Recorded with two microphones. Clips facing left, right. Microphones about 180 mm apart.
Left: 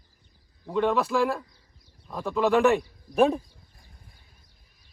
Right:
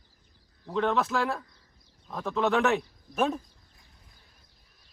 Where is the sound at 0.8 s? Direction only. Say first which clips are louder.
Left 3 dB; centre (ahead or behind).